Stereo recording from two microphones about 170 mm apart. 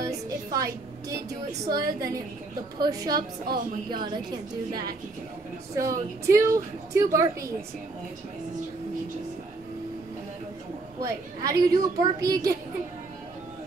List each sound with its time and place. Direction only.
0.5 s a woman's voice: 20° right (ahead or behind)
3.2 s a woman's voice: 60° right (ahead or behind)
3.9 s a woman's voice: 25° right (ahead or behind)
5.8 s a woman's voice: 20° right (ahead or behind)
11.0 s a woman's voice: 20° right (ahead or behind)